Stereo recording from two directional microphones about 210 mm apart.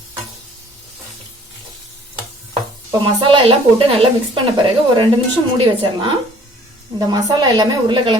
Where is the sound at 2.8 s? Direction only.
20° right (ahead or behind).